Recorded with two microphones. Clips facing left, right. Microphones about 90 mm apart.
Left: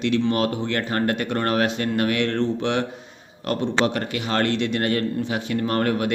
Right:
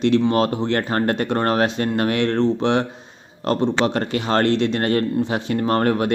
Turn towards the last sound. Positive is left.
turn(degrees=-30)  # may be behind; listen again after turning